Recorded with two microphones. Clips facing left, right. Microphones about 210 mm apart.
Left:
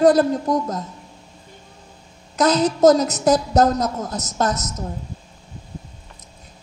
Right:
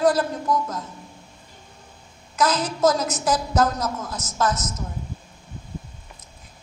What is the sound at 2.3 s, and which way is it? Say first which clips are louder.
A woman's voice: left 6 dB; 40° left (ahead or behind).